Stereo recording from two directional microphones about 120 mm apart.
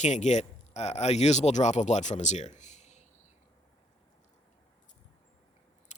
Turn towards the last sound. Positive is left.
turn(degrees=90)